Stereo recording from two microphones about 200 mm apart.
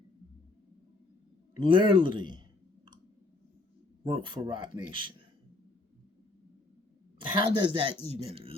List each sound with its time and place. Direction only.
1.5 s speech: 25° right (ahead or behind)
4.0 s speech: 25° right (ahead or behind)
7.2 s speech: 25° right (ahead or behind)